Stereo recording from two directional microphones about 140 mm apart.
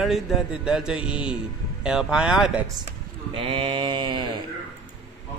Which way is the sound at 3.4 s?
35° right (ahead or behind).